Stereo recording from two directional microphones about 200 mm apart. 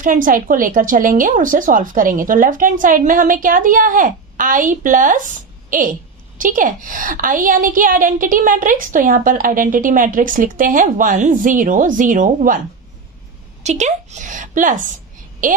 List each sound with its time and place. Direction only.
0.0 s a woman's voice: 40° right (ahead or behind)
6.3 s a woman's voice: 40° right (ahead or behind)
13.6 s a woman's voice: 35° right (ahead or behind)